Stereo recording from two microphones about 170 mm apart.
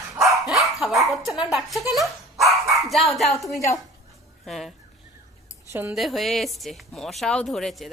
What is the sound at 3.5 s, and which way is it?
Speech, 15° left (ahead or behind).